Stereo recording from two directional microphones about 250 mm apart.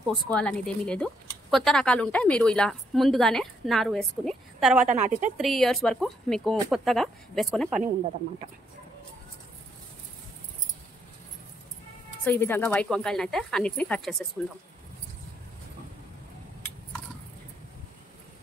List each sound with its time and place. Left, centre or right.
0.3 s a woman's voice: centre
4.8 s a woman's voice: right
5.4 s a woman's voice: centre
12.3 s a woman's voice: centre